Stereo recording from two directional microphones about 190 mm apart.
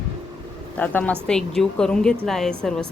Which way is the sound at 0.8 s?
10° left (ahead or behind).